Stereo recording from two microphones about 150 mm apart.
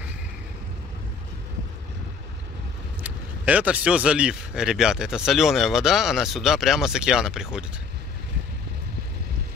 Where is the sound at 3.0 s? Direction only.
10° right (ahead or behind).